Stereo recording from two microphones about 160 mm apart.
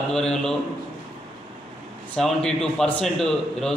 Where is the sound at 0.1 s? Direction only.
5° left (ahead or behind).